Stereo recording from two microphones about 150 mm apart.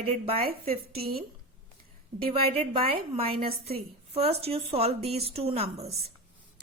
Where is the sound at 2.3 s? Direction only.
40° right (ahead or behind).